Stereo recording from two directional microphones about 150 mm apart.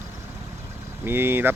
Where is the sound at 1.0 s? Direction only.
15° right (ahead or behind).